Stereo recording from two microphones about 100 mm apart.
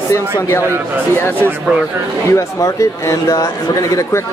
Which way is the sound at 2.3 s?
35° left (ahead or behind).